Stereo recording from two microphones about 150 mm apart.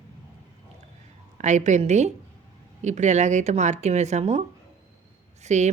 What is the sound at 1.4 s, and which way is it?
Speech, 50° right (ahead or behind).